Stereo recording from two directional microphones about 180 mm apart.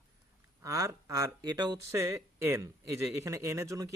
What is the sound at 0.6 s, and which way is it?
A man's voice, 20° right (ahead or behind).